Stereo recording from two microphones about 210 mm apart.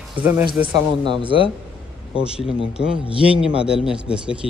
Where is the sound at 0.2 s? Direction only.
10° right (ahead or behind).